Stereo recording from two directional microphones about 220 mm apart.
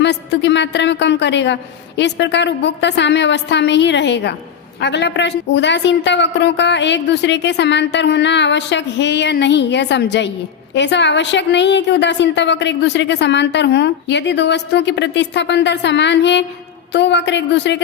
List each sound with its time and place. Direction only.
0.0 s a woman's voice: 50° left (ahead or behind)